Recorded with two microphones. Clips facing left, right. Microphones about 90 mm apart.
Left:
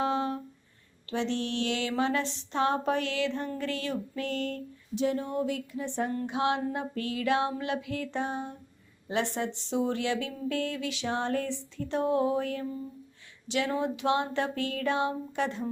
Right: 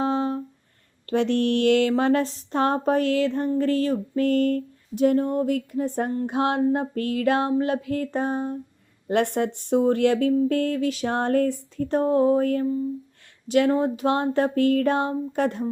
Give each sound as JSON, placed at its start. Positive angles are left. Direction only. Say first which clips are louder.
{"t": 0.0, "sound": "a sound", "louder": "right 5 dB", "side_deg": -35}
{"t": 1.1, "sound": "speech", "louder": "right 9 dB", "side_deg": -55}
{"t": 9.0, "sound": "speech", "louder": "right 8 dB", "side_deg": -55}